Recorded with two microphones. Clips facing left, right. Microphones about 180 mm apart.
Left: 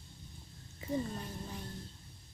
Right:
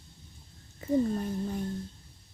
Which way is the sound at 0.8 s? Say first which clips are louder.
Right 8 dB; 50° right (ahead or behind).